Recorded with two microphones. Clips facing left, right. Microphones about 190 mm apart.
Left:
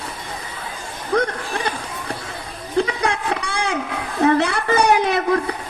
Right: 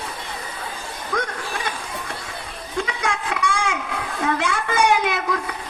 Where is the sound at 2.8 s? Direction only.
35° left (ahead or behind).